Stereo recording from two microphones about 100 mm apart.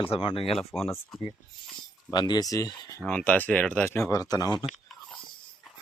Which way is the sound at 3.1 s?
10° left (ahead or behind).